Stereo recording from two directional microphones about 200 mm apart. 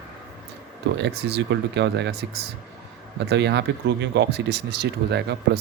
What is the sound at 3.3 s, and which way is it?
Speech, 60° right (ahead or behind).